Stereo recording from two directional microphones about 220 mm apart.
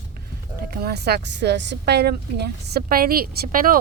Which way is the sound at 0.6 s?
45° right (ahead or behind).